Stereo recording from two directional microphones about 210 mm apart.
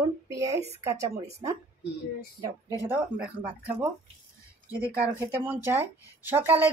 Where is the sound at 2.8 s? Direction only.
10° right (ahead or behind).